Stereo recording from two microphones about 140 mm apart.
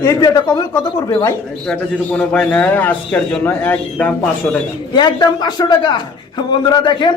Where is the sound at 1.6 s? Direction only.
10° left (ahead or behind).